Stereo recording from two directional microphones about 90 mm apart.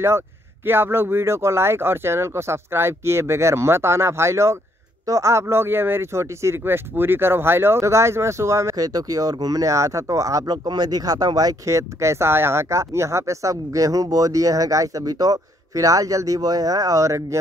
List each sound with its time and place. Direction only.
0.7 s speech: 25° right (ahead or behind)